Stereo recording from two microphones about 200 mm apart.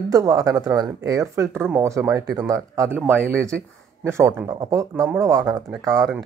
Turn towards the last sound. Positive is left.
turn(degrees=-20)  # may be behind; listen again after turning